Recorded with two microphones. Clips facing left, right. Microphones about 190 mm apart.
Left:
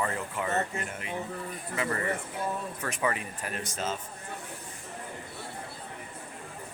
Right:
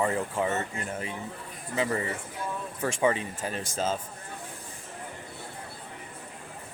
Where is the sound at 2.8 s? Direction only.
25° right (ahead or behind).